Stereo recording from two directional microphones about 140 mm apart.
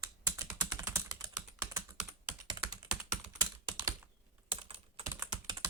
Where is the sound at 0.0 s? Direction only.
20° right (ahead or behind).